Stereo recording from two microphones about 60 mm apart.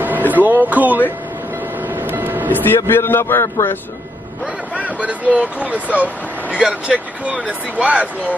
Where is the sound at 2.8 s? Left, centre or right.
Left.